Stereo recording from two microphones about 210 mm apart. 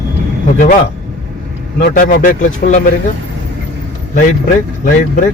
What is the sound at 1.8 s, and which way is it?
Speech, 45° left (ahead or behind).